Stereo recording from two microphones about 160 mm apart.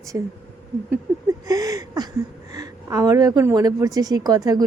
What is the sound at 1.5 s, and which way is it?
A woman's voice, 20° right (ahead or behind).